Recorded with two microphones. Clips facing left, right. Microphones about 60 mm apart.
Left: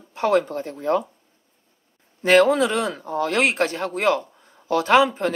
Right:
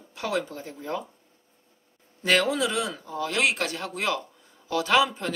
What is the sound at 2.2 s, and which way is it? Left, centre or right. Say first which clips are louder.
Speech: left 8 dB; left.